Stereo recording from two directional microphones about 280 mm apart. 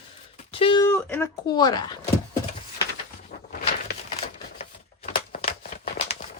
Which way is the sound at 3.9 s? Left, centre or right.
Left.